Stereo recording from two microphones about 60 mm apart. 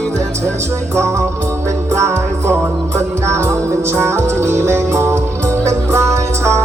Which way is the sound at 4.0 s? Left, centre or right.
Right.